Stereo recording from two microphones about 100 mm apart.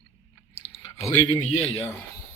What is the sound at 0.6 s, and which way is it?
Chewing, 60° left (ahead or behind).